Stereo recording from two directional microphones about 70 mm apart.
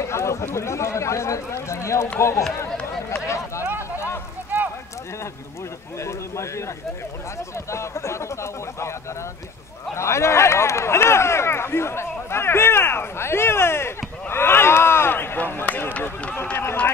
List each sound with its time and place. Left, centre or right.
0.0 s speech: left
3.3 s a sound: left
4.5 s clip-clop: right
5.9 s speech: left
9.9 s speech: left